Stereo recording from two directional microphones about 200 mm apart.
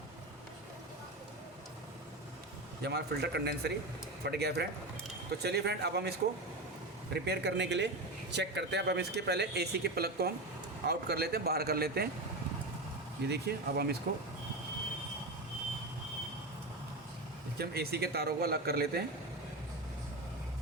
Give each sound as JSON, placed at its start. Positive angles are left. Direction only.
{"t": 2.8, "sound": "a man's voice", "side_deg": -55}
{"t": 13.2, "sound": "speech", "side_deg": -55}
{"t": 17.6, "sound": "speech", "side_deg": -50}